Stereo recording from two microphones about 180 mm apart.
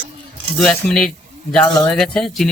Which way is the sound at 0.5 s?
5° left (ahead or behind).